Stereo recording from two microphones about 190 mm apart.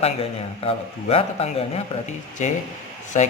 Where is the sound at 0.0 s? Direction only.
30° left (ahead or behind).